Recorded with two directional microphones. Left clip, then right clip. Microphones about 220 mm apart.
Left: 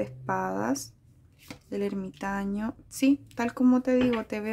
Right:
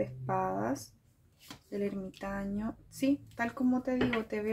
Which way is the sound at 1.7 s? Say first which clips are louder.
Left 4 dB; 45° left (ahead or behind).